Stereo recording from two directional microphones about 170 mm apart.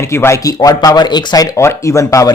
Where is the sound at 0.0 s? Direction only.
15° left (ahead or behind).